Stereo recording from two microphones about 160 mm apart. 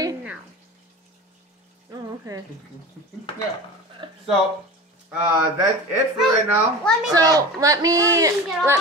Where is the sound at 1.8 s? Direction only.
20° right (ahead or behind).